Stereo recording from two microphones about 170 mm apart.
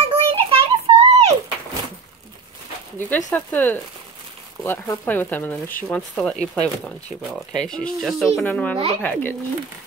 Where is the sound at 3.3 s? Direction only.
10° left (ahead or behind).